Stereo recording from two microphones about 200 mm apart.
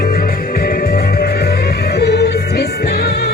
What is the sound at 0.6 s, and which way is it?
Music, 50° left (ahead or behind).